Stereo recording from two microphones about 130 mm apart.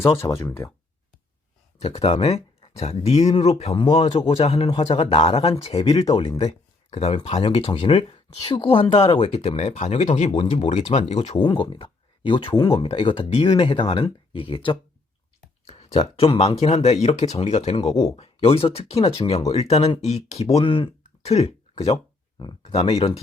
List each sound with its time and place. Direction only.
0.2 s speech: 20° left (ahead or behind)
1.8 s speech: 50° left (ahead or behind)
10.7 s speech: 60° left (ahead or behind)
11.3 s speech: 35° left (ahead or behind)
15.6 s speech: 50° left (ahead or behind)
20.7 s speech: 40° left (ahead or behind)
21.2 s a sound: 55° left (ahead or behind)
22.6 s speech: 50° left (ahead or behind)